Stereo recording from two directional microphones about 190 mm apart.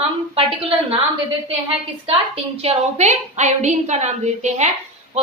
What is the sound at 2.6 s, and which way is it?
A woman's voice, 35° right (ahead or behind).